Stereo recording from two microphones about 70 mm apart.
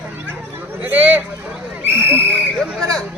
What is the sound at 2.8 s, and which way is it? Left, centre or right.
Speech, centre.